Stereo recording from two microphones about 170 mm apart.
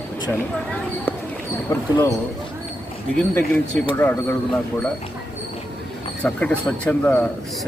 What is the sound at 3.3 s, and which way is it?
Speech, 10° left (ahead or behind).